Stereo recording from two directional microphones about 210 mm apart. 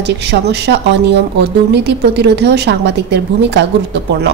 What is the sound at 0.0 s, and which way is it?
A woman's voice, 55° right (ahead or behind).